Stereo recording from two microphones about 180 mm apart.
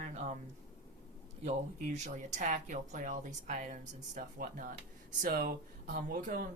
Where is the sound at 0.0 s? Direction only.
40° right (ahead or behind).